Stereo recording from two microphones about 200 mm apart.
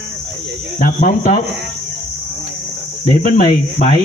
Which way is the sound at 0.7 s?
40° left (ahead or behind).